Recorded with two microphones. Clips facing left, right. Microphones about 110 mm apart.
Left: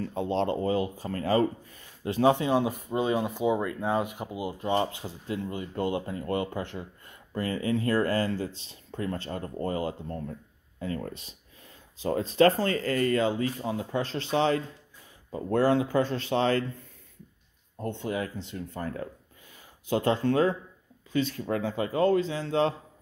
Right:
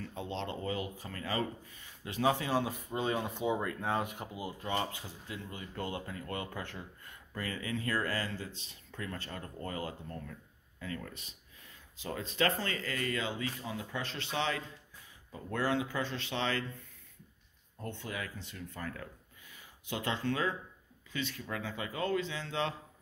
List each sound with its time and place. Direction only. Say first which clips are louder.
0.0 s speech: left 11 dB; 40° left (ahead or behind)
2.4 s speech: left 7 dB; 20° left (ahead or behind)
4.7 s speech: left 7 dB; 35° left (ahead or behind)
7.3 s speech: left 9 dB; 35° left (ahead or behind)
17.7 s speech: left 9 dB; 25° left (ahead or behind)